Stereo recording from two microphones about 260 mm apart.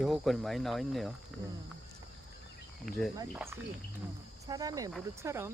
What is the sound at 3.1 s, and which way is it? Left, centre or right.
Speech, centre.